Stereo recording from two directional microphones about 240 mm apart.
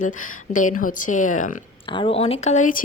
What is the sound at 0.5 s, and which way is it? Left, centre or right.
Speech, left.